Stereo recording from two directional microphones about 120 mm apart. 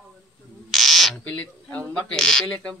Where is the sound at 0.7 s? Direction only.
Centre (ahead or behind).